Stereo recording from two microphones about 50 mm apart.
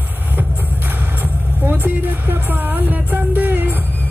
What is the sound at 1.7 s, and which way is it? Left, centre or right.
Music, right.